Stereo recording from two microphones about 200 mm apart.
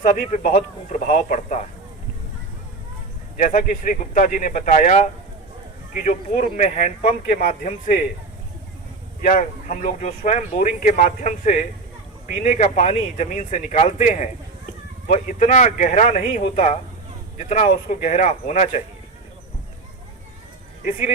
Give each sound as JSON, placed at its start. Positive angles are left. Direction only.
{"t": 0.0, "sound": "speech", "side_deg": 35}
{"t": 3.3, "sound": "speech", "side_deg": 40}
{"t": 9.2, "sound": "speech", "side_deg": 40}